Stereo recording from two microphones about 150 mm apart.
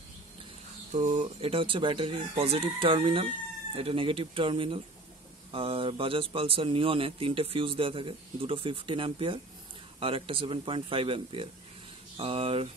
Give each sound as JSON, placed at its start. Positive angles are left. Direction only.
{"t": 0.9, "sound": "speech", "side_deg": -55}
{"t": 1.4, "sound": "speech", "side_deg": -35}